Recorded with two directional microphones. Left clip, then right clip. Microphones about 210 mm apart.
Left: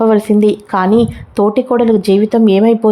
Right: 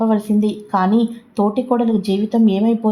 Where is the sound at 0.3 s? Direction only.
30° left (ahead or behind).